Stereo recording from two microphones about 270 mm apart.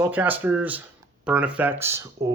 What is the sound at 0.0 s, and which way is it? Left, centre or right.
Speech, centre.